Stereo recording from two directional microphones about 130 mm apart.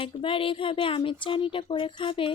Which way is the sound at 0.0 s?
45° left (ahead or behind).